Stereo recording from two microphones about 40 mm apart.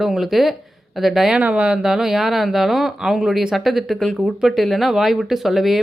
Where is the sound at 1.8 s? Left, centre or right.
Centre.